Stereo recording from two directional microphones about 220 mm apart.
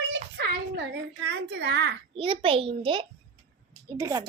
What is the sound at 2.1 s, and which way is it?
A child's voice, 25° right (ahead or behind).